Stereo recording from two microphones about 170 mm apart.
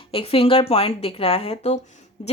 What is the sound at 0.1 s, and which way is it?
A woman's voice, 35° left (ahead or behind).